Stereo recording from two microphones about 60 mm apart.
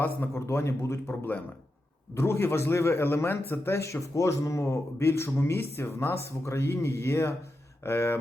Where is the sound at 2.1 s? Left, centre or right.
Left.